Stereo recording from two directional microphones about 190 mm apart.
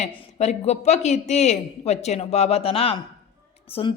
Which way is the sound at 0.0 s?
35° left (ahead or behind).